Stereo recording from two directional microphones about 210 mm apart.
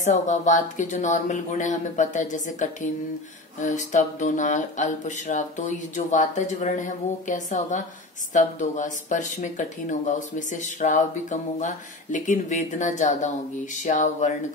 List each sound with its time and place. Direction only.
0.0 s speech: 35° left (ahead or behind)